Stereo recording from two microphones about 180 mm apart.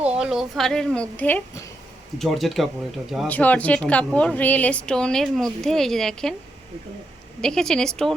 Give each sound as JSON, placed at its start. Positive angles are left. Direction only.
{"t": 0.1, "sound": "a woman's voice", "side_deg": -5}
{"t": 7.4, "sound": "a woman's voice", "side_deg": 5}